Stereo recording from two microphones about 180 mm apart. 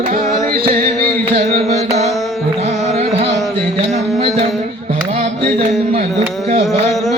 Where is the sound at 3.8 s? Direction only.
35° right (ahead or behind).